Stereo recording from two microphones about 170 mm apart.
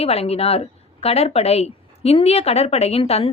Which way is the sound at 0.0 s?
35° left (ahead or behind).